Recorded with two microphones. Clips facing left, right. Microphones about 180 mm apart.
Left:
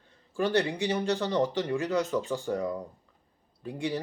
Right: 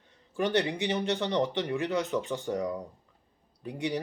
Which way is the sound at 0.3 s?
20° right (ahead or behind).